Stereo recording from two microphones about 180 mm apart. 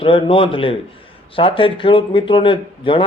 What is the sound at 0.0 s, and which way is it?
Speech, 30° left (ahead or behind).